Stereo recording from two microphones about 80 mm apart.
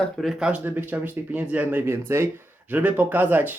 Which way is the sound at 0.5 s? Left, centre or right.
Right.